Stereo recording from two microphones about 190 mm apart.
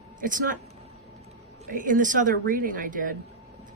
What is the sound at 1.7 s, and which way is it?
Speech, 45° right (ahead or behind).